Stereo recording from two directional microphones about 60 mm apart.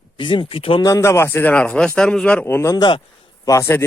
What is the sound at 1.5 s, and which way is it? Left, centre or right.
Speech, centre.